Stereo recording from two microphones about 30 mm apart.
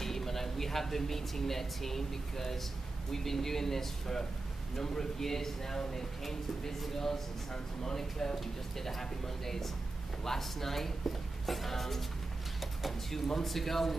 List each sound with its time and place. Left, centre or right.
0.0 s speech: centre
13.1 s speech: centre